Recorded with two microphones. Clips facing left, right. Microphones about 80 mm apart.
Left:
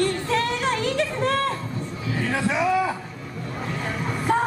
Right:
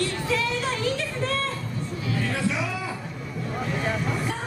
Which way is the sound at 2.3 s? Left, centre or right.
Left.